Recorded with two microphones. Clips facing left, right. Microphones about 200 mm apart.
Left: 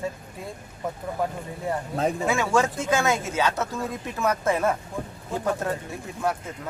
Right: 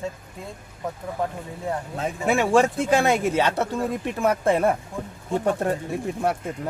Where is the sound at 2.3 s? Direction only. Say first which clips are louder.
Right 8 dB; 30° right (ahead or behind).